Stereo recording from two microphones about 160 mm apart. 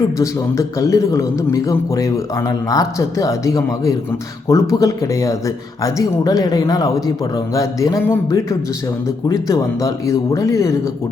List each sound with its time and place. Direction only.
0.2 s a man's voice: 20° left (ahead or behind)